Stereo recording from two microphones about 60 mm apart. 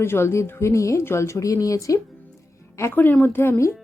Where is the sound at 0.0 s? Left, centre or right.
Left.